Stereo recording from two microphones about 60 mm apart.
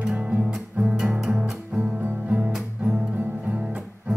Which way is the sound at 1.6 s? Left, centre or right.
Right.